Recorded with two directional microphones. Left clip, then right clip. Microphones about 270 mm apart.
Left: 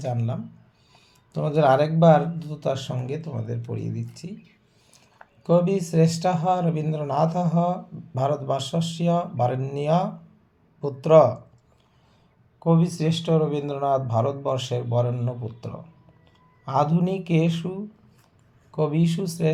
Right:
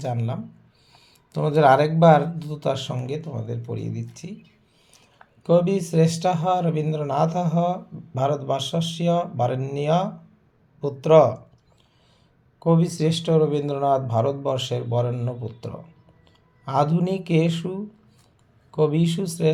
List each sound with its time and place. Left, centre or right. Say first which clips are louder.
0.0 s a man's voice: right 1 dB; centre
5.4 s a man's voice: right 2 dB; centre
12.5 s a man's voice: right 2 dB; centre